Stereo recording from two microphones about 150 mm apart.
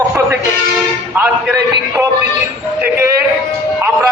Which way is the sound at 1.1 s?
15° right (ahead or behind).